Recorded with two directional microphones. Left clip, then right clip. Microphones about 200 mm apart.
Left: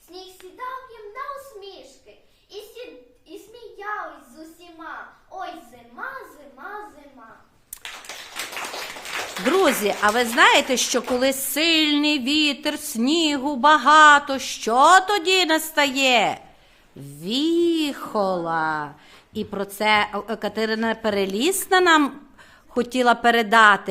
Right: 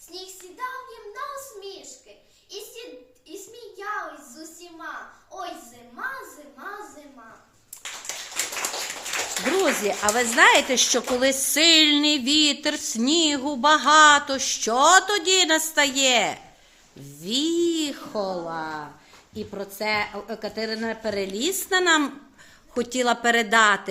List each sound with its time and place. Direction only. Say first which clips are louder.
9.6 s speech: left 4 dB; 25° left (ahead or behind)
10.1 s a woman's voice: even; 10° left (ahead or behind)
18.0 s a woman's voice: left 5 dB; 40° left (ahead or behind); by 23.9 s 25° left (ahead or behind)